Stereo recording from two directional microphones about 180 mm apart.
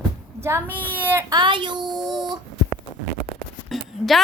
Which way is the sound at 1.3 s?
25° right (ahead or behind).